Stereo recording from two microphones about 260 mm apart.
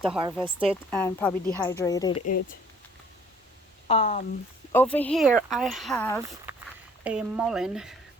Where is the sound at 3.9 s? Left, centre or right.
Left.